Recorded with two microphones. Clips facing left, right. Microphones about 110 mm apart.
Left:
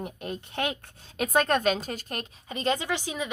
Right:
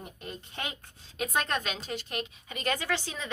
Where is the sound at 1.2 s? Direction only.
50° left (ahead or behind); by 3.2 s 15° left (ahead or behind).